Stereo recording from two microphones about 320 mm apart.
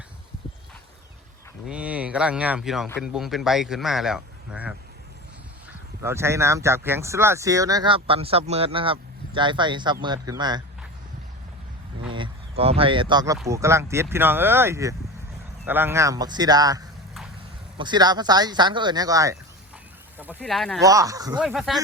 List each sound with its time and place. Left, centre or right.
1.6 s speech: centre
6.0 s speech: centre
12.1 s speech: centre
20.1 s a sound: centre
20.4 s speech: centre
20.8 s speech: centre